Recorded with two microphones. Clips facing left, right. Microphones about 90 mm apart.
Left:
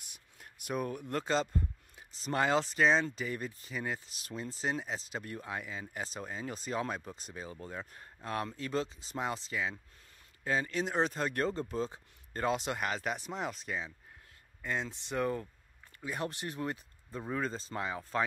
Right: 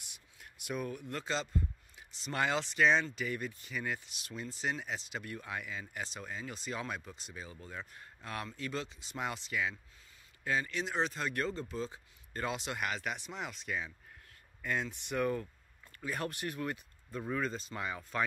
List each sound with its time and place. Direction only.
0.0 s speech: 40° left (ahead or behind)